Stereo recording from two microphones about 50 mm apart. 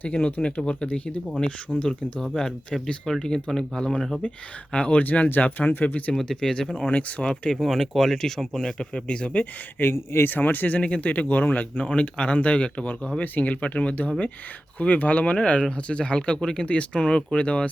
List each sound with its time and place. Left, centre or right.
0.0 s speech: left; by 4.0 s centre
4.7 s speech: left
6.1 s speech: centre
7.6 s speech: centre; by 9.5 s left
9.8 s speech: left
10.2 s speech: left
11.9 s speech: left